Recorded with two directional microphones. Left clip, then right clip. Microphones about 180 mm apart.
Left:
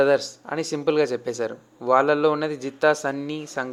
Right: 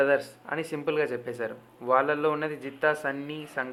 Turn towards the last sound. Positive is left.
turn(degrees=40)  # may be behind; listen again after turning